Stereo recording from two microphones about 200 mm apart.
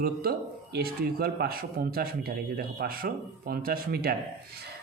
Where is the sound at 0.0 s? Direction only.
50° right (ahead or behind).